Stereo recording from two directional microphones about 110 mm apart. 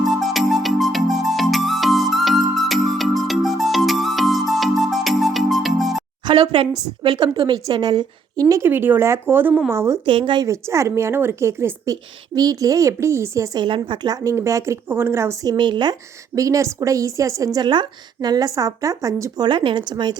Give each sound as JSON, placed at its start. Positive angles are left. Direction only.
{"t": 0.0, "sound": "music", "side_deg": 0}
{"t": 6.3, "sound": "speech", "side_deg": -65}
{"t": 7.2, "sound": "a woman's voice", "side_deg": -40}
{"t": 8.6, "sound": "a woman's voice", "side_deg": -20}
{"t": 10.1, "sound": "speech", "side_deg": -45}
{"t": 10.4, "sound": "a woman's voice", "side_deg": -25}
{"t": 13.7, "sound": "a woman's voice", "side_deg": -45}
{"t": 15.5, "sound": "speech", "side_deg": -45}
{"t": 16.3, "sound": "a woman's voice", "side_deg": -30}
{"t": 19.5, "sound": "speech", "side_deg": -45}